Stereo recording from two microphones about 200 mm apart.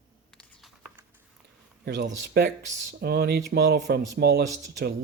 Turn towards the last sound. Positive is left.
turn(degrees=-55)  # may be behind; listen again after turning